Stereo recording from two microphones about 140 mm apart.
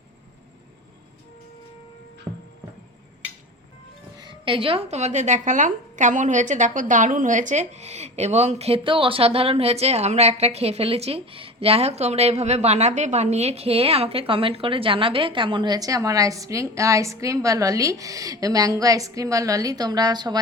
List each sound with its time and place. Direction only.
2.3 s music: 35° right (ahead or behind)
4.2 s speech: 35° right (ahead or behind)